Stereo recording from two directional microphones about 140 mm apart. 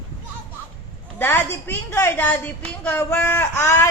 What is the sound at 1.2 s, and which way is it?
A woman's voice, 15° left (ahead or behind).